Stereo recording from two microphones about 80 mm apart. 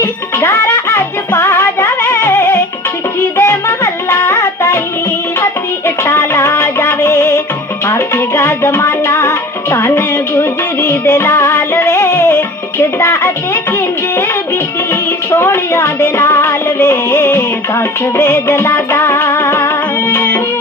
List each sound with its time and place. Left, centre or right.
0.0 s music: left
15.3 s music: left